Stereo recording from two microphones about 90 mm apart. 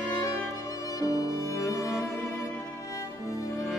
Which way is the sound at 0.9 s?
40° left (ahead or behind).